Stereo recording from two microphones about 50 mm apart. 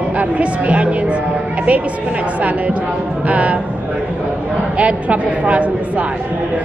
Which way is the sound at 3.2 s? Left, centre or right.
Right.